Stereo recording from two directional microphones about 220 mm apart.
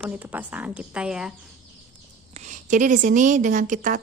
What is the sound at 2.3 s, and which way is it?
A woman's voice, 35° right (ahead or behind).